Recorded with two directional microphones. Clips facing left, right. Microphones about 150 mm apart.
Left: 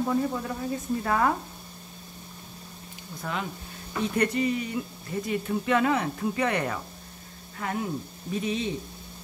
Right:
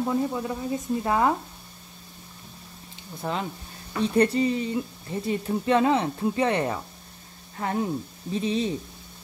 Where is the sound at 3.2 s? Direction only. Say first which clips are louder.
Right 3 dB; 30° right (ahead or behind).